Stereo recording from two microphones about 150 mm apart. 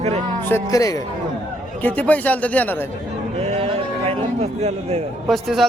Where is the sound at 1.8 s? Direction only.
10° left (ahead or behind).